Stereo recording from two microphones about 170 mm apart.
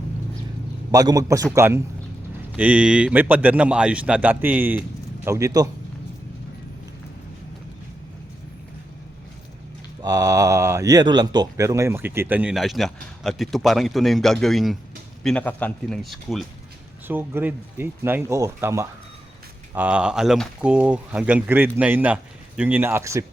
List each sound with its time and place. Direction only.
0.9 s a man's voice: 20° right (ahead or behind)
10.0 s a man's voice: 20° right (ahead or behind); by 16.5 s centre (ahead or behind)
17.1 s speech: 10° right (ahead or behind)